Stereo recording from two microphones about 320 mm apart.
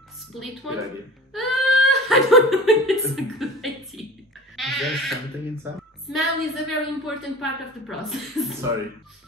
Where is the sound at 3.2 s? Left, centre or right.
Centre.